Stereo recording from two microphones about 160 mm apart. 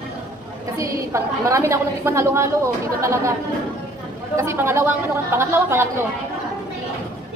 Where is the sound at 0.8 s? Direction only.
20° right (ahead or behind).